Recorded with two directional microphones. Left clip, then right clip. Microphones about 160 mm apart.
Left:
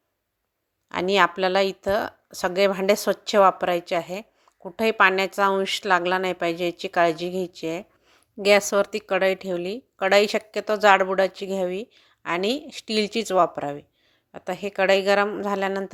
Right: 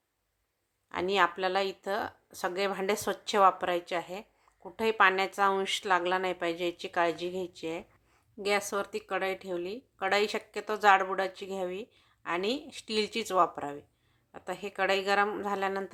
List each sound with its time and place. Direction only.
0.9 s a woman's voice: 40° left (ahead or behind)